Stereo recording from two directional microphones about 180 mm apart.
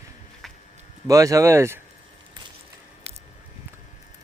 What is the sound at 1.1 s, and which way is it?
Speech, 15° right (ahead or behind).